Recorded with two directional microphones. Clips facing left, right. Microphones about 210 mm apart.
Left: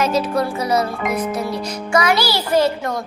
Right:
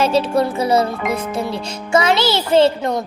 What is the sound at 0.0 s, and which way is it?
Music, 30° right (ahead or behind).